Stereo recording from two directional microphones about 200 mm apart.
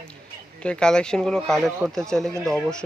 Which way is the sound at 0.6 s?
5° left (ahead or behind).